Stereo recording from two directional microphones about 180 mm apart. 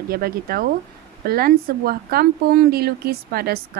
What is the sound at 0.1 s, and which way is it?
Speech, 55° right (ahead or behind).